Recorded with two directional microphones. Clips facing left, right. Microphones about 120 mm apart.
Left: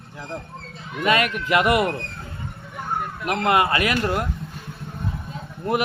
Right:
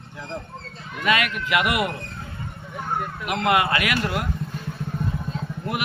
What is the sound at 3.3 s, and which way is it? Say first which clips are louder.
Speech: left 1 dB; 35° left (ahead or behind).